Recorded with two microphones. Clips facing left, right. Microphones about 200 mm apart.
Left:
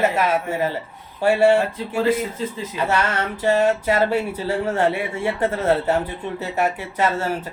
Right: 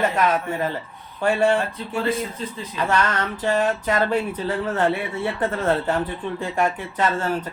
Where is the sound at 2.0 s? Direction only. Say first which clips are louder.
Left 4 dB; 25° left (ahead or behind).